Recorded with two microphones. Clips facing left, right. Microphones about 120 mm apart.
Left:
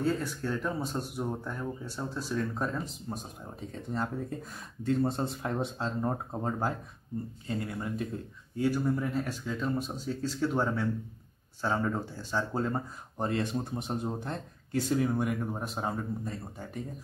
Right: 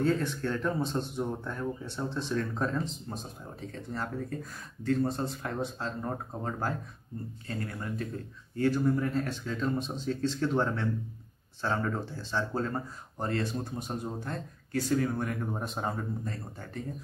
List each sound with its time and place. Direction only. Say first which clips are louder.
0.0 s speech: right 2 dB; 5° left (ahead or behind)
3.9 s speech: left 2 dB; 20° left (ahead or behind); by 16.1 s centre (ahead or behind)
16.3 s speech: left 1 dB; 15° left (ahead or behind)